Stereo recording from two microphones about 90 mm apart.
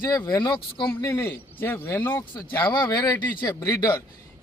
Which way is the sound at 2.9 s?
40° left (ahead or behind).